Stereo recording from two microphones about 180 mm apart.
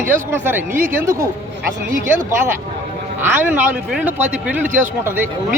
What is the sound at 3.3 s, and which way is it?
Speech, 10° right (ahead or behind).